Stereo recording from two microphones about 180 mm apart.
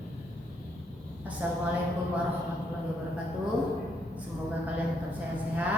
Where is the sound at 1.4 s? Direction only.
10° right (ahead or behind).